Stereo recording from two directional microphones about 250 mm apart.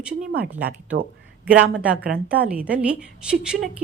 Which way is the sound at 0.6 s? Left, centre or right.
Right.